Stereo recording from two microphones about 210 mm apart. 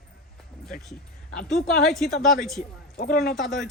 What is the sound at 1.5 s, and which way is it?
Speech, centre (ahead or behind).